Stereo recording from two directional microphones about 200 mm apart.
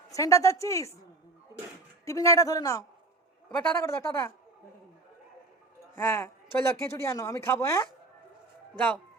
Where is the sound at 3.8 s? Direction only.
15° left (ahead or behind).